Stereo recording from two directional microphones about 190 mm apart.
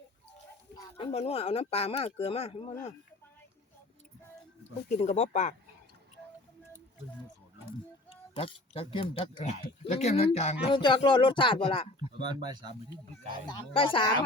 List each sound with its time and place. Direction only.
0.9 s speech: 30° left (ahead or behind)
4.9 s speech: 35° left (ahead or behind)
8.4 s speech: 30° left (ahead or behind)
12.2 s speech: 20° right (ahead or behind)
13.5 s speech: 25° left (ahead or behind)